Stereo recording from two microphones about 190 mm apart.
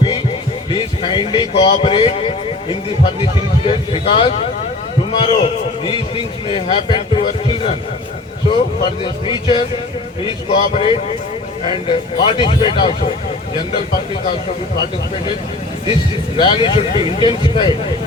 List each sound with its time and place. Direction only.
0.7 s a man's voice: 25° left (ahead or behind)
16.4 s a man's voice: 25° left (ahead or behind)